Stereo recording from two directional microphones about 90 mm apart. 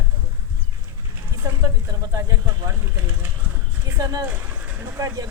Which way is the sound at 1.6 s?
45° right (ahead or behind).